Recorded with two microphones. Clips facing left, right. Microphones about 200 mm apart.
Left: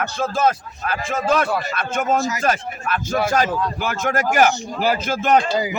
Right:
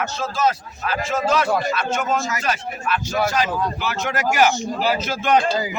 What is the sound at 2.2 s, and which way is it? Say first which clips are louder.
A man's voice: left 4 dB; 40° left (ahead or behind).